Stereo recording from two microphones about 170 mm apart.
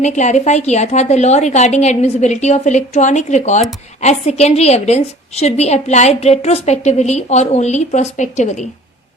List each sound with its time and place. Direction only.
0.0 s a woman's voice: 45° left (ahead or behind)